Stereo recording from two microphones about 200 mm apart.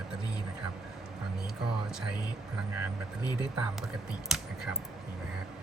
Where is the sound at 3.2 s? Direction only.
20° left (ahead or behind).